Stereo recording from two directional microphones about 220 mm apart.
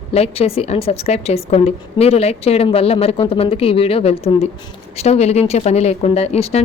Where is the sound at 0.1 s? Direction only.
25° left (ahead or behind).